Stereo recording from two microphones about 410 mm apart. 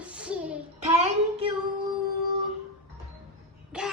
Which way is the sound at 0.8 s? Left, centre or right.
Centre.